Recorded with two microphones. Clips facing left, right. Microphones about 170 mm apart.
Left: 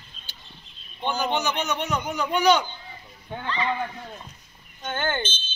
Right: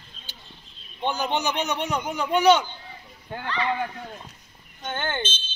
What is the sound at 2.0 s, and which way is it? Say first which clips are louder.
Speech: right 2 dB; 25° right (ahead or behind).